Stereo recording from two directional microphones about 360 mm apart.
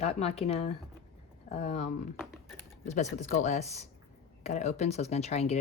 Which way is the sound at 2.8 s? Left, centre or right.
Centre.